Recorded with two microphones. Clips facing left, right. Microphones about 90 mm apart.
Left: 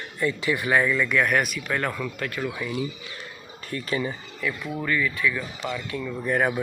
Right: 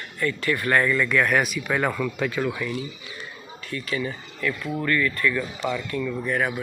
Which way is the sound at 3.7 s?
35° left (ahead or behind).